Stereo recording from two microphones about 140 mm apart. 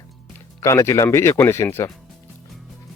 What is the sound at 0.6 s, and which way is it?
A man's voice, 20° left (ahead or behind).